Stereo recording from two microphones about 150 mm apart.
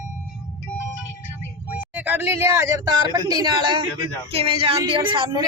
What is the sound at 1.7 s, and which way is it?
A man's voice, 10° right (ahead or behind).